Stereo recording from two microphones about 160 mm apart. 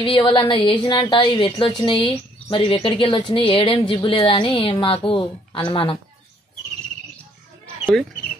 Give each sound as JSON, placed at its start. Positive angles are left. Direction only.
{"t": 0.0, "sound": "speech", "side_deg": 30}